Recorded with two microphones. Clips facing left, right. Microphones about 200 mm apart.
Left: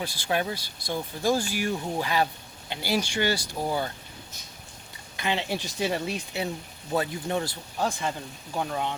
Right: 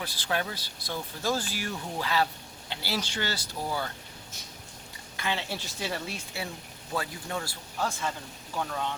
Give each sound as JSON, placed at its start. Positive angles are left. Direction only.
{"t": 0.0, "sound": "speech", "side_deg": 15}
{"t": 5.1, "sound": "speech", "side_deg": 20}